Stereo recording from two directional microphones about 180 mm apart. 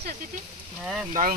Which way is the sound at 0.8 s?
Centre (ahead or behind).